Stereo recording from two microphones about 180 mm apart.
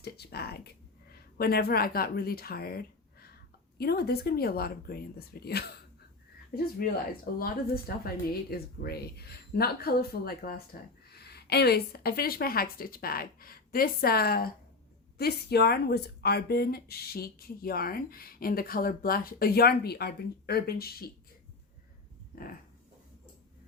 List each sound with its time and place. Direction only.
0.0 s a woman's voice: 60° left (ahead or behind)
6.8 s speech: 55° left (ahead or behind)